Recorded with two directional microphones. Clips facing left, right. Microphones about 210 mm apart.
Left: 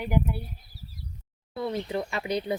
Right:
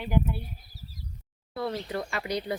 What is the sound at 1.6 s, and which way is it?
Speech, 20° left (ahead or behind).